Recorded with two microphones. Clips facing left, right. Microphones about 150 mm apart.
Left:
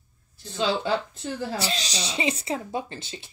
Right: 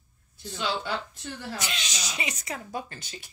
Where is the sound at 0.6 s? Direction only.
30° left (ahead or behind).